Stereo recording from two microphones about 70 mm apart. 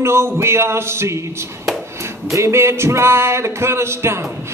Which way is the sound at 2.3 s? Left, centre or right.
Right.